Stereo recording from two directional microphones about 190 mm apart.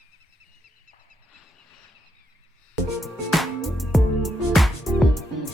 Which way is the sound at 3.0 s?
Centre (ahead or behind).